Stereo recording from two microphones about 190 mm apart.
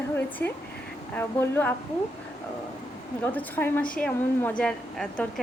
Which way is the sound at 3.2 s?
10° left (ahead or behind).